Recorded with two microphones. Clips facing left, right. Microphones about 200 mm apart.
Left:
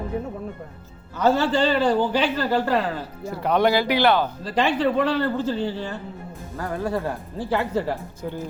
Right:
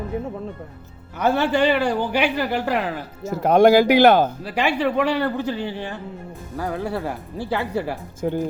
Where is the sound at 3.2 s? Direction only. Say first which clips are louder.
Right 6 dB; 45° right (ahead or behind).